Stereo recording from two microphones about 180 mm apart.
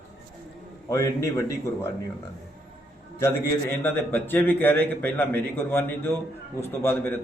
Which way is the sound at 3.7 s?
10° left (ahead or behind).